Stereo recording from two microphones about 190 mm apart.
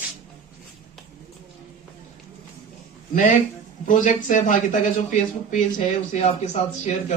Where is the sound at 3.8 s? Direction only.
45° left (ahead or behind).